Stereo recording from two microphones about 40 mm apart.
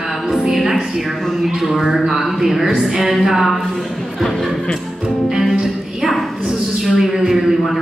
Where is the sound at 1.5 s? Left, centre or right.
Centre.